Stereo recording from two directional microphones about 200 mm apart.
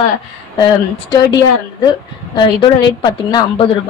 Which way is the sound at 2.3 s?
25° left (ahead or behind).